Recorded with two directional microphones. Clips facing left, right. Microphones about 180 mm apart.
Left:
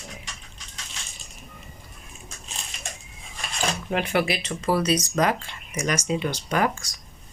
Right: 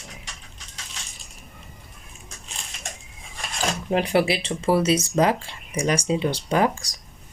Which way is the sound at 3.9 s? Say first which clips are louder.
Right 4 dB; 30° right (ahead or behind).